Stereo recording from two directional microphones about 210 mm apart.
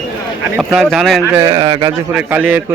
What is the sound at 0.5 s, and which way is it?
Speech, centre (ahead or behind).